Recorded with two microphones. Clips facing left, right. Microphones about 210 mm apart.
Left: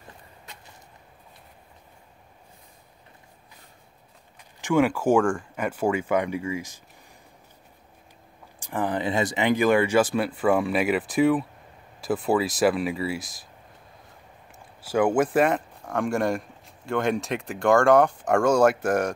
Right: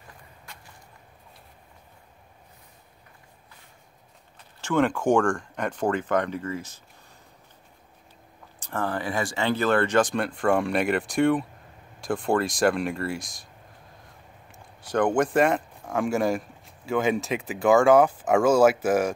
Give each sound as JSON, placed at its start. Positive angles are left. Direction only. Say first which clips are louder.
{"t": 0.5, "sound": "vehicle", "louder": "left 1 dB", "side_deg": 20}
{"t": 4.6, "sound": "speech", "louder": "left 2 dB", "side_deg": 10}
{"t": 8.5, "sound": "speech", "louder": "left 2 dB", "side_deg": 15}
{"t": 14.5, "sound": "speech", "louder": "left 1 dB", "side_deg": 5}